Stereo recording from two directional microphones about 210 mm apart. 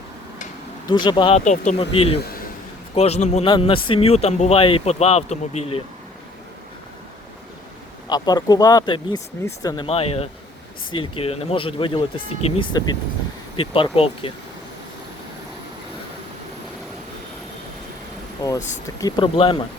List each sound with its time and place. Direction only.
0.9 s a man's voice: 20° left (ahead or behind)
2.2 s a sound: 45° left (ahead or behind)
2.9 s a man's voice: 30° left (ahead or behind)
8.1 s a man's voice: 20° left (ahead or behind)
18.4 s a man's voice: 15° left (ahead or behind)